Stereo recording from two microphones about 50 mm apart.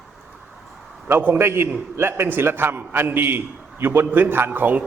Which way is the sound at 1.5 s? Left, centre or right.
Right.